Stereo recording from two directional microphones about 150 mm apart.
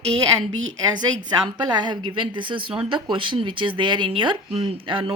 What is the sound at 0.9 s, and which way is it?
Speech, 30° right (ahead or behind).